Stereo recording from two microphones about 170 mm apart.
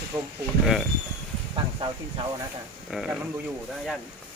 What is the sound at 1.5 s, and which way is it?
Speech, 30° right (ahead or behind).